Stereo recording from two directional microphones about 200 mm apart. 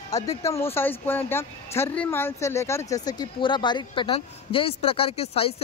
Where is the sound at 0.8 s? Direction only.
10° left (ahead or behind).